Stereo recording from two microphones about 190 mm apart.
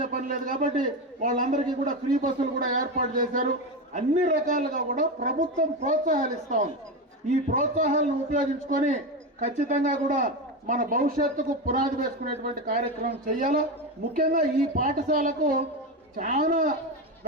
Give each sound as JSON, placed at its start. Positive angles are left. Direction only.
{"t": 0.0, "sound": "a man's voice", "side_deg": -45}